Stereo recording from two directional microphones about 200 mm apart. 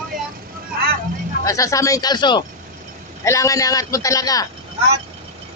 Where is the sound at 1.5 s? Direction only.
15° left (ahead or behind).